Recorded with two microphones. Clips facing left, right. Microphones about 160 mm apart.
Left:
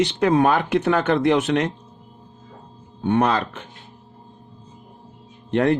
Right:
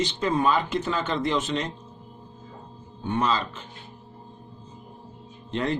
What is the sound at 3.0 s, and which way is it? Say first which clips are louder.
Speech: left 6 dB; 65° left (ahead or behind).